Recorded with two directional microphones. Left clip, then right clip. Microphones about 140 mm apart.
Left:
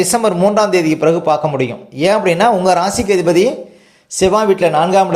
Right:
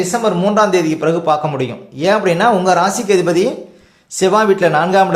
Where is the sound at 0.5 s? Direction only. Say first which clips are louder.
Even; 20° left (ahead or behind).